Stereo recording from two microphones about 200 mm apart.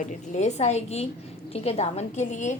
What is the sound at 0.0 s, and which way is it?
A woman's voice, 35° left (ahead or behind).